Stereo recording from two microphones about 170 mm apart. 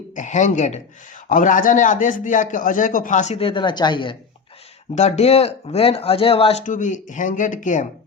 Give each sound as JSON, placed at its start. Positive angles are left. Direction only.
{"t": 0.1, "sound": "a man's voice", "side_deg": 45}
{"t": 4.9, "sound": "speech", "side_deg": 40}